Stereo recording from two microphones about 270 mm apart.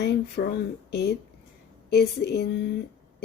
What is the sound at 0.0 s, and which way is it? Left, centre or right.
Speech, left.